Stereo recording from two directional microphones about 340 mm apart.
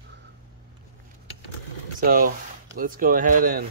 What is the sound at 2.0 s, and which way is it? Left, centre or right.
Speech, right.